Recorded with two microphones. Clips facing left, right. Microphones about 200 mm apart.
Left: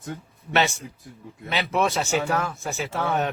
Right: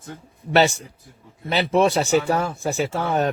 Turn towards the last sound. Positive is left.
turn(degrees=-35)  # may be behind; listen again after turning